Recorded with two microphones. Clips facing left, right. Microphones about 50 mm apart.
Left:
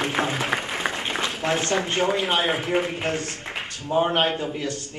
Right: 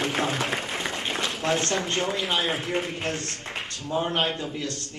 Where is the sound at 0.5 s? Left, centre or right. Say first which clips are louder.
Left 4 dB; left.